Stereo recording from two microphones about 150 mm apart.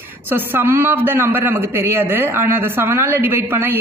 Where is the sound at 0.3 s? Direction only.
15° right (ahead or behind).